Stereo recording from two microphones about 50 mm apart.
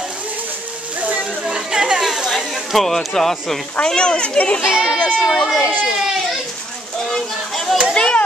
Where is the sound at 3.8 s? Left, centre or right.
Centre.